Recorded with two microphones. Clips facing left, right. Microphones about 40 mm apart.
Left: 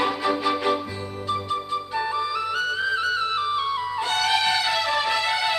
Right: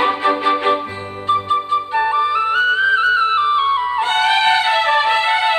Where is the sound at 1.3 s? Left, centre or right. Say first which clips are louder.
Right 10 dB; right.